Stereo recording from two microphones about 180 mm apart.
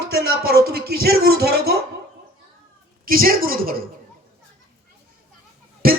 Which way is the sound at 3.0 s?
55° right (ahead or behind).